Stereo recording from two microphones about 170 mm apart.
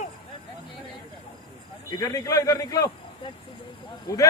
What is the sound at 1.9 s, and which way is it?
A man's voice, 20° left (ahead or behind).